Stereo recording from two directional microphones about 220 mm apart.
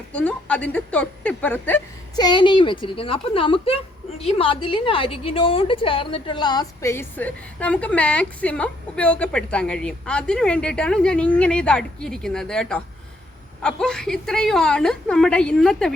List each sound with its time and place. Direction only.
0.1 s a woman's voice: 5° left (ahead or behind)
2.1 s a woman's voice: 20° left (ahead or behind); by 16.0 s centre (ahead or behind)